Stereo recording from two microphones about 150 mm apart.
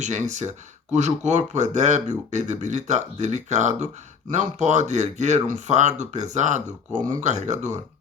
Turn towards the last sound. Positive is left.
turn(degrees=-50)  # may be behind; listen again after turning